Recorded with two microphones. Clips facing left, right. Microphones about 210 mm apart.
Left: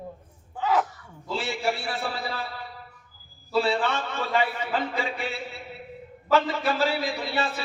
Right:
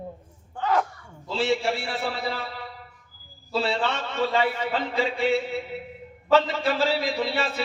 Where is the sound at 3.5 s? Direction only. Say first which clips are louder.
Left 1 dB; 25° right (ahead or behind).